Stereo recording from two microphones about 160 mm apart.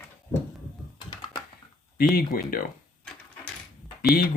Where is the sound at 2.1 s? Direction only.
65° left (ahead or behind).